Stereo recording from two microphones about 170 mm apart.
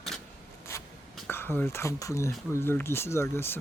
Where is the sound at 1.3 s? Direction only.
15° left (ahead or behind).